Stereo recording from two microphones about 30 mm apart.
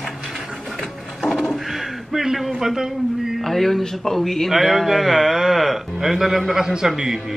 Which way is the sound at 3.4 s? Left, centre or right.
Centre.